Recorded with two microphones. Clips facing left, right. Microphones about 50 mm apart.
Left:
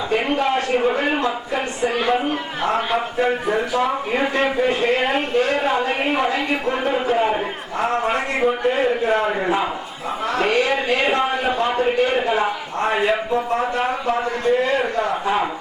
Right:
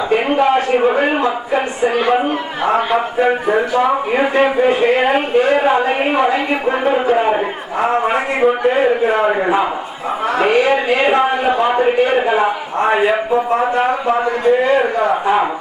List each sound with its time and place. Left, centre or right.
0.1 s a man's voice: centre